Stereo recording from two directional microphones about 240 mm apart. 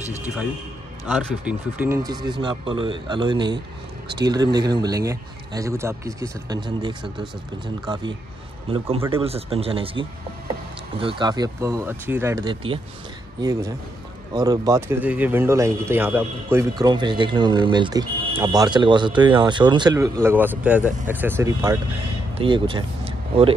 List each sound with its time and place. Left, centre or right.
1.0 s speech: centre
9.1 s speech: right